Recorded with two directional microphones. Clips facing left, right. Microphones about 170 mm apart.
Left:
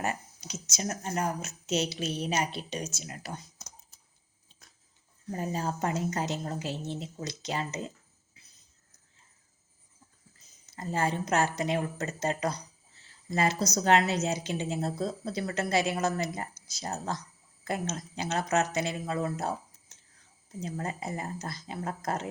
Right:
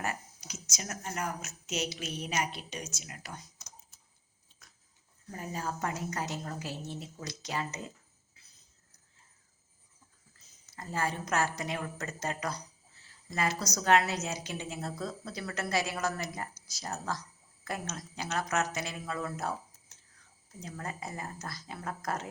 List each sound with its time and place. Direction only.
0.0 s speech: 25° left (ahead or behind)
5.3 s a woman's voice: 30° left (ahead or behind)
10.7 s a woman's voice: 25° left (ahead or behind)